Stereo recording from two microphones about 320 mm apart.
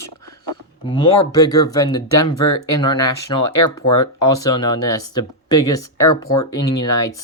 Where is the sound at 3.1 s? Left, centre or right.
Left.